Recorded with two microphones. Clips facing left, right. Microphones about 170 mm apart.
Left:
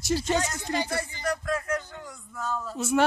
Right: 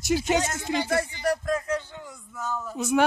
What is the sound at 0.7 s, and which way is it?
Speech, 10° right (ahead or behind).